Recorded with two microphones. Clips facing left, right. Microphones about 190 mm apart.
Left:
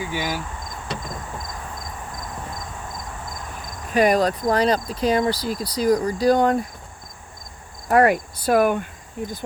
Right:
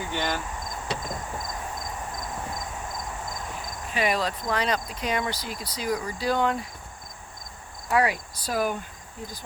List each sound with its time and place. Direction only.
0.1 s speech: 5° left (ahead or behind)
3.9 s speech: 45° left (ahead or behind)
7.9 s speech: 50° left (ahead or behind)